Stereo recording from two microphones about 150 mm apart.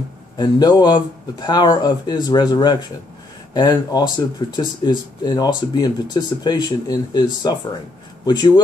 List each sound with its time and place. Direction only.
0.4 s speech: 25° left (ahead or behind)